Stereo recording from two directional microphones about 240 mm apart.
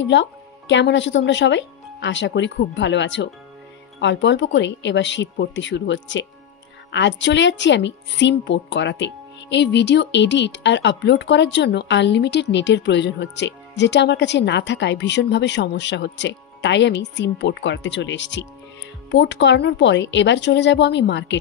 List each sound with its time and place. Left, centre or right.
0.0 s a woman's voice: left